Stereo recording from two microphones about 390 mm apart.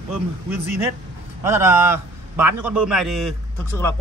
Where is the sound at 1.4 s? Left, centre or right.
Centre.